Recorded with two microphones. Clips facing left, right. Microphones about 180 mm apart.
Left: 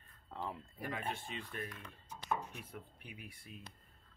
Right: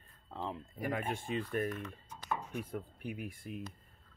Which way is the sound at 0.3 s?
25° right (ahead or behind).